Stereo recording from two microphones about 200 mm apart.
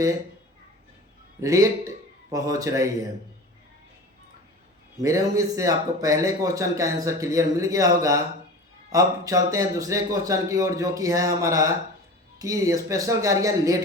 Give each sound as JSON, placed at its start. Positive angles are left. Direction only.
{"t": 1.4, "sound": "speech", "side_deg": -15}
{"t": 4.9, "sound": "speech", "side_deg": -15}